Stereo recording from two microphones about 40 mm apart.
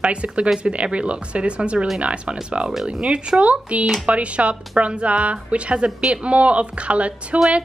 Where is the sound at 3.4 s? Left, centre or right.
Right.